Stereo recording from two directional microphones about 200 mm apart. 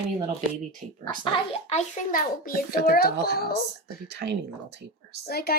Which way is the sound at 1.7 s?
40° left (ahead or behind).